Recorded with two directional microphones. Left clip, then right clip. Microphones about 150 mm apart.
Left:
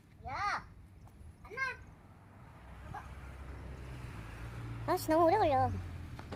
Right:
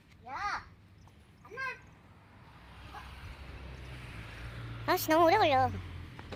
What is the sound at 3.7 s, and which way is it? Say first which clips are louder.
Vehicle: right 2 dB; 65° left (ahead or behind).